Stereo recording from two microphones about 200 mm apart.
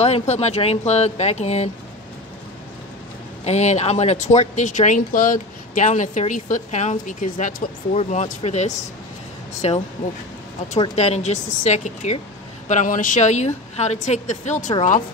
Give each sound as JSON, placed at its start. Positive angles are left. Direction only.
{"t": 0.0, "sound": "speech", "side_deg": 30}
{"t": 3.4, "sound": "speech", "side_deg": 35}
{"t": 11.0, "sound": "speech", "side_deg": 35}